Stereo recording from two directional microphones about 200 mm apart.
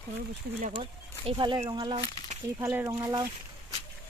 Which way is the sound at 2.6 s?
10° right (ahead or behind).